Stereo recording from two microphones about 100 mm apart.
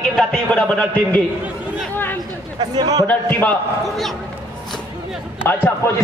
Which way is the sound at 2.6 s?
45° right (ahead or behind).